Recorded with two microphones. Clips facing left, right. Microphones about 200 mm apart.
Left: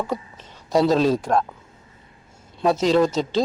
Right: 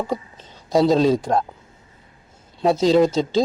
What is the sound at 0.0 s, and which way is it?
A man's voice, 25° right (ahead or behind).